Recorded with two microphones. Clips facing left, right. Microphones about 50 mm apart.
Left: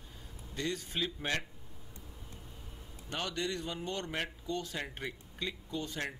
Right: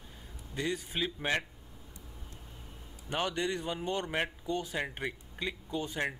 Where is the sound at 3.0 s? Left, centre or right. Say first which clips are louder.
Right 4 dB; right.